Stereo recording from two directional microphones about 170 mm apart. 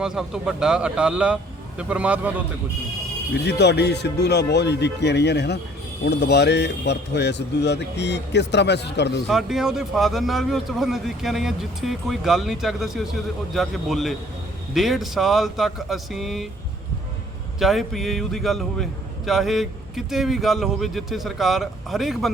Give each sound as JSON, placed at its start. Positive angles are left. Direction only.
{"t": 0.0, "sound": "a man's voice", "side_deg": -5}
{"t": 3.4, "sound": "speech", "side_deg": 80}
{"t": 9.2, "sound": "a man's voice", "side_deg": 0}
{"t": 17.6, "sound": "a man's voice", "side_deg": 0}